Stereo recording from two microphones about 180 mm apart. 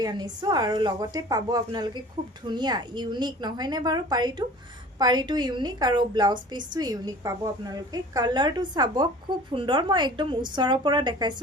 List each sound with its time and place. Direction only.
0.0 s a woman's voice: 20° right (ahead or behind)